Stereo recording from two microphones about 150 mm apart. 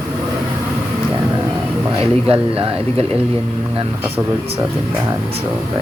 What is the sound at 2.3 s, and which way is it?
Speech, 40° right (ahead or behind).